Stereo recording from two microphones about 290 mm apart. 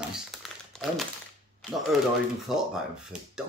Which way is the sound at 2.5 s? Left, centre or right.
Centre.